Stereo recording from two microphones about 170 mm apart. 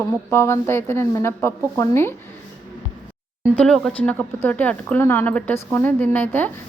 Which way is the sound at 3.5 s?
5° left (ahead or behind).